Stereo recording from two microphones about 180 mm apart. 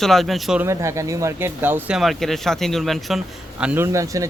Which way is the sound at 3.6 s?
10° right (ahead or behind).